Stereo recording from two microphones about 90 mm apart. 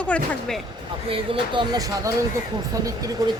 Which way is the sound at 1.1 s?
70° right (ahead or behind).